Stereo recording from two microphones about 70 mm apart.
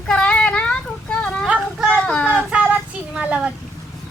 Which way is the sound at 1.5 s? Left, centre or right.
Centre.